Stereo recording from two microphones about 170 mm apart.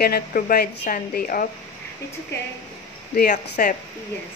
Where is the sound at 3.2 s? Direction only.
50° left (ahead or behind).